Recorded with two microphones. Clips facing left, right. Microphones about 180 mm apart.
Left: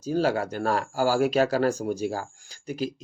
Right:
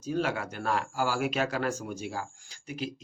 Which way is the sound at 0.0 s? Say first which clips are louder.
Left 6 dB; 35° left (ahead or behind).